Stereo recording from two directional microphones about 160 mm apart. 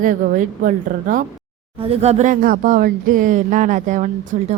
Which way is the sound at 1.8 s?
40° right (ahead or behind).